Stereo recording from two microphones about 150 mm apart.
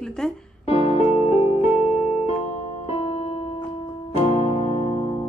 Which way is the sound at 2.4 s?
45° left (ahead or behind).